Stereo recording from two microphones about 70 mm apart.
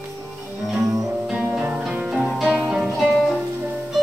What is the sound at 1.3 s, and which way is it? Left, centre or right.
Music, centre.